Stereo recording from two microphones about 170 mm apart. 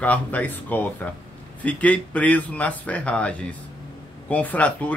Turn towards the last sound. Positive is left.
turn(degrees=10)  # may be behind; listen again after turning